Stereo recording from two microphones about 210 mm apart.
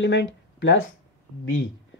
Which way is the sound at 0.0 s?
60° left (ahead or behind).